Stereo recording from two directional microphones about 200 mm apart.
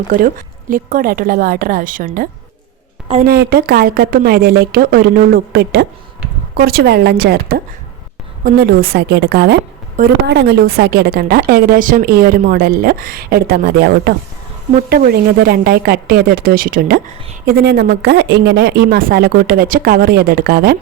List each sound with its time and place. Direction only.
0.7 s a woman's voice: 45° right (ahead or behind)
3.2 s a woman's voice: 50° right (ahead or behind)